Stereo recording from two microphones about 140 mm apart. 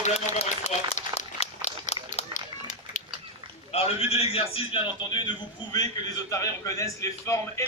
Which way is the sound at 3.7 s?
45° left (ahead or behind).